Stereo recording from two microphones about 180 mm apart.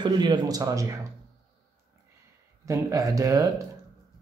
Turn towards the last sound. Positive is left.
turn(degrees=-20)  # may be behind; listen again after turning